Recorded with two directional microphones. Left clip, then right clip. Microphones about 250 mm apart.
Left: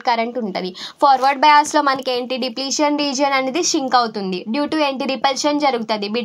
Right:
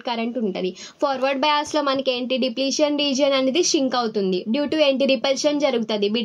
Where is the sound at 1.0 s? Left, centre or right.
Left.